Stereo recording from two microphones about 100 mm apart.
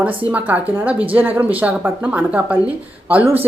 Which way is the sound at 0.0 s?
15° right (ahead or behind).